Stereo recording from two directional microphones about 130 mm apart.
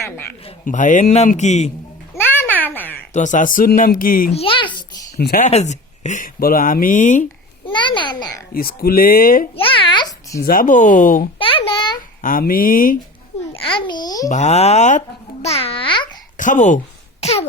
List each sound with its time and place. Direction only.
0.6 s a man's voice: 80° left; by 1.7 s 60° left (ahead or behind)
2.1 s a sound: 15° left (ahead or behind)
3.1 s speech: 70° left (ahead or behind); by 4.3 s 90° left
4.3 s a child's voice: 45° left (ahead or behind)
5.4 s speech: 60° left (ahead or behind); by 7.3 s 80° left
7.6 s a child's voice: 40° left (ahead or behind)
8.9 s speech: 90° left
9.6 s babbling: 45° left (ahead or behind)
10.5 s speech: 85° left
11.3 s babbling: 45° left (ahead or behind)
11.9 s speech: 90° left
13.7 s a child's voice: 40° left (ahead or behind)
14.3 s a child's voice: 65° left (ahead or behind); by 16.0 s 40° left (ahead or behind)
16.4 s a child's voice: 75° left (ahead or behind); by 17.5 s 55° left (ahead or behind)